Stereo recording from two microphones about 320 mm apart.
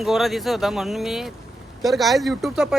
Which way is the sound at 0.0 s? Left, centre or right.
Centre.